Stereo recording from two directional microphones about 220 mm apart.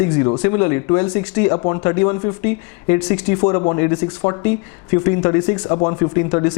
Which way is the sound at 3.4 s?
25° left (ahead or behind).